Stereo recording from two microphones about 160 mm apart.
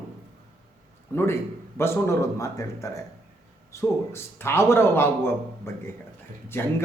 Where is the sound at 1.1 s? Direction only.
15° left (ahead or behind).